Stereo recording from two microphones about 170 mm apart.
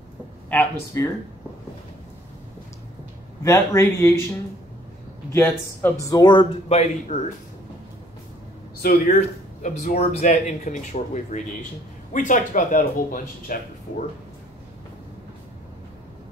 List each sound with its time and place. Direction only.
0.5 s speech: 10° left (ahead or behind)
3.4 s speech: 20° left (ahead or behind)
5.3 s a man's voice: 15° left (ahead or behind); by 7.2 s 40° left (ahead or behind)
8.8 s speech: 55° left (ahead or behind)